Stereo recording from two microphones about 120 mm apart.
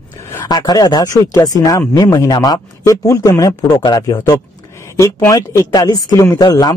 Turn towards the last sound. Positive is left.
turn(degrees=35)  # may be behind; listen again after turning